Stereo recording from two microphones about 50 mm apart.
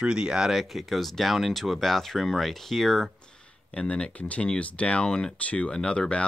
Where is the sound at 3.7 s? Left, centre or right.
Left.